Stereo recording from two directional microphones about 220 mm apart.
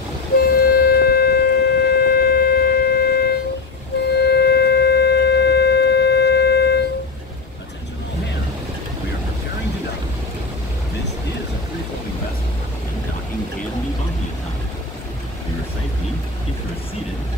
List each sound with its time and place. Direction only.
0.4 s wind instrument: 40° left (ahead or behind)